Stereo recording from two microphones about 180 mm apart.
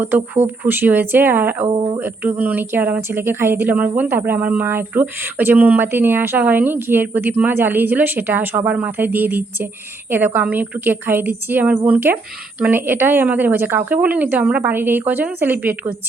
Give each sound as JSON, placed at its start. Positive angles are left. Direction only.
{"t": 0.6, "sound": "speech", "side_deg": -10}
{"t": 1.7, "sound": "speech", "side_deg": -25}
{"t": 2.0, "sound": "speech", "side_deg": -10}